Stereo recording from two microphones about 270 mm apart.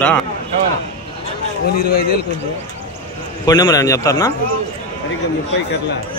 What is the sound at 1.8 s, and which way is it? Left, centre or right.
Speech, left.